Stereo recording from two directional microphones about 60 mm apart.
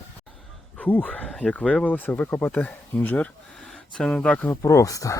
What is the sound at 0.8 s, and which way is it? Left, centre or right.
Speech, left.